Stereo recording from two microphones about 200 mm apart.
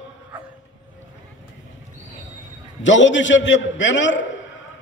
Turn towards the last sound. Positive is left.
turn(degrees=65)  # may be behind; listen again after turning